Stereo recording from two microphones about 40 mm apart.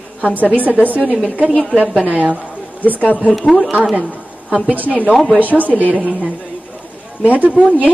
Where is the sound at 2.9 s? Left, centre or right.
Left.